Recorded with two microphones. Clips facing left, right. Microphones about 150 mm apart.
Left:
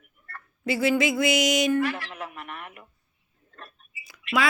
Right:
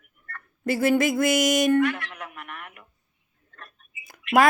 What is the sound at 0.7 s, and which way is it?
Speech, 50° right (ahead or behind).